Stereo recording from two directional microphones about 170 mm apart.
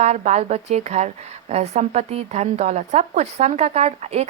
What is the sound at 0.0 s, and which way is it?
A woman's voice, 40° right (ahead or behind).